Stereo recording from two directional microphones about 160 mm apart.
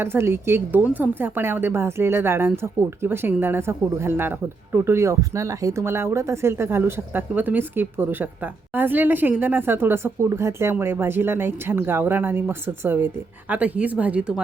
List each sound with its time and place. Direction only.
0.0 s a woman's voice: 15° right (ahead or behind)